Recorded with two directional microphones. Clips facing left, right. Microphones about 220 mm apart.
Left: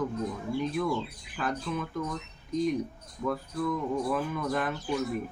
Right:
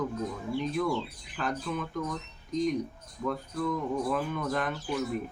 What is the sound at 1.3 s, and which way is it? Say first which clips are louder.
Speech: left 1 dB; 5° left (ahead or behind).